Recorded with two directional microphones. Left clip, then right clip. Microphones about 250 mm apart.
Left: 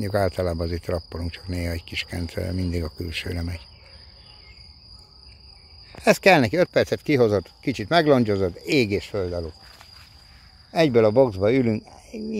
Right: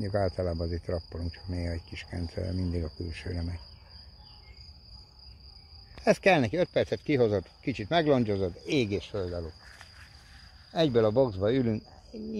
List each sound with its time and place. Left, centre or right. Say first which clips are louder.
0.0 s cricket: left 6 dB; centre
6.0 s speech: left 7 dB; centre
8.6 s speech: left 8 dB; left
9.1 s speech: left 7 dB; left
10.7 s speech: left 7 dB; left